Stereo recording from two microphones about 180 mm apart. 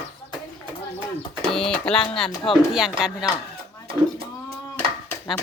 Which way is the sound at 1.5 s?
5° left (ahead or behind).